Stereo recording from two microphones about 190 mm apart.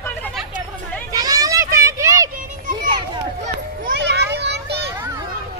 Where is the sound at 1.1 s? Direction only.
20° right (ahead or behind).